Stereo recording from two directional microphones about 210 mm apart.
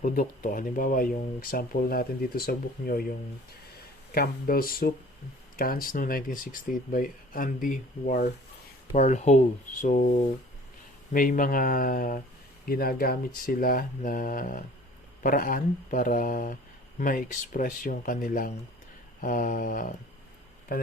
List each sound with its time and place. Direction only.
0.0 s speech: 40° left (ahead or behind)